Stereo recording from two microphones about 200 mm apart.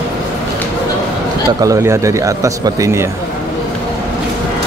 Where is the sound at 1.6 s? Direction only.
15° right (ahead or behind).